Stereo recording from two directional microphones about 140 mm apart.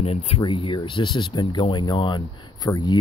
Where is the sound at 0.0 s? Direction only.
45° left (ahead or behind).